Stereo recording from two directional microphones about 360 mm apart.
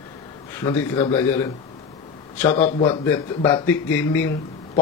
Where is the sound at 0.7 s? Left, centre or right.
Centre.